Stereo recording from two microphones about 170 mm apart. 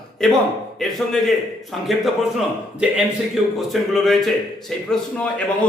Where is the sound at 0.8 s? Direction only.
Centre (ahead or behind).